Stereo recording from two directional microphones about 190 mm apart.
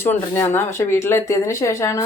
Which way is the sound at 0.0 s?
10° left (ahead or behind).